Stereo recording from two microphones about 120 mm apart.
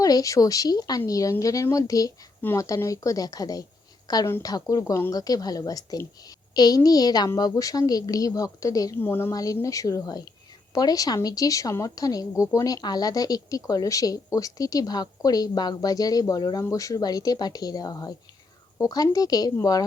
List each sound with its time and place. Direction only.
0.0 s a woman's voice: 30° left (ahead or behind)
9.0 s speech: 20° left (ahead or behind)
9.3 s a woman's voice: 30° left (ahead or behind)